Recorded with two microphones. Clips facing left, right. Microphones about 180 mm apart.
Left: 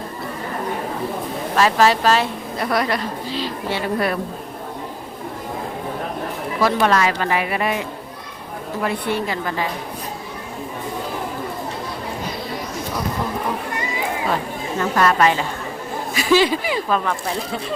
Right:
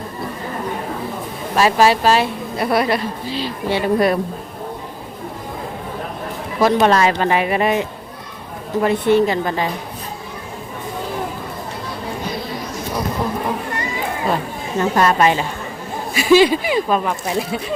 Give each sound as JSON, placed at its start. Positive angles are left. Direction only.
{"t": 1.5, "sound": "speech", "side_deg": -15}
{"t": 6.6, "sound": "a woman's voice", "side_deg": -20}
{"t": 14.8, "sound": "a woman's voice", "side_deg": -20}